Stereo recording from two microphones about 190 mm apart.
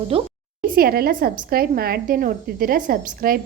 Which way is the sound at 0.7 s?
50° right (ahead or behind).